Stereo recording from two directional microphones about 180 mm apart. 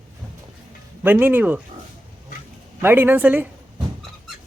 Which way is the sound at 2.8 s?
10° right (ahead or behind).